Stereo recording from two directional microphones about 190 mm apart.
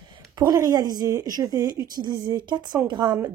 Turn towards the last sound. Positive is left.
turn(degrees=-20)  # may be behind; listen again after turning